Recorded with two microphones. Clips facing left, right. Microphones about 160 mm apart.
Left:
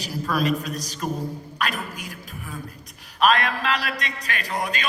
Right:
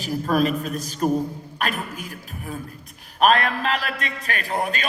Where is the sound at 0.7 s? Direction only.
40° left (ahead or behind).